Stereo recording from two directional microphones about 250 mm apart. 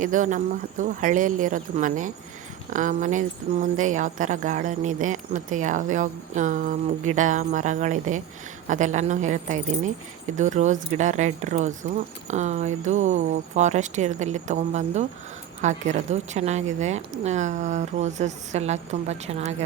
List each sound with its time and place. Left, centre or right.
0.0 s speech: right